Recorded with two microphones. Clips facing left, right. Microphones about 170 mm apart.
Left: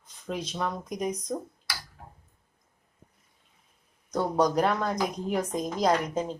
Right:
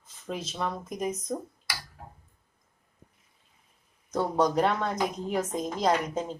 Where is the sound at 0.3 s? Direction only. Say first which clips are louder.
Left 1 dB; 5° right (ahead or behind).